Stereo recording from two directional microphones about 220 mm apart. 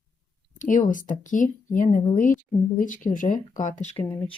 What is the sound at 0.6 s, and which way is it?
Speech, 35° left (ahead or behind).